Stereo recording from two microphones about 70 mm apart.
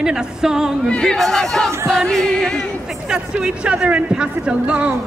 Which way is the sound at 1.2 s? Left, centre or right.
Centre.